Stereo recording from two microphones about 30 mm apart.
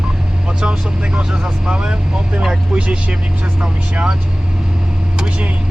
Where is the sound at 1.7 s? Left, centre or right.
Right.